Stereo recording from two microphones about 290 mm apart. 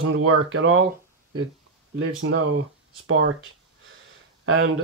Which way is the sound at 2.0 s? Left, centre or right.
Right.